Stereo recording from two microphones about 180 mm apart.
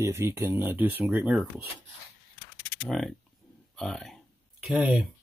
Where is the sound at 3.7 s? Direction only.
Centre (ahead or behind).